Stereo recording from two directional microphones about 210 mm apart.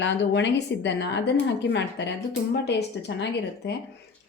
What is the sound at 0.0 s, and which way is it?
A woman's voice, 55° left (ahead or behind).